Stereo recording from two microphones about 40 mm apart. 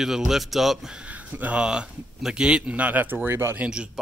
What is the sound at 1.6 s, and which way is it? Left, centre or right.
Speech, right.